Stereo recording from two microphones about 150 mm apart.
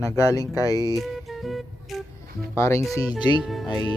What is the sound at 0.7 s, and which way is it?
Speech, 25° right (ahead or behind).